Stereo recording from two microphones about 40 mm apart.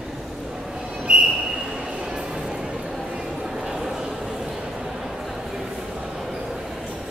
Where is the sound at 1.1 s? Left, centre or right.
Right.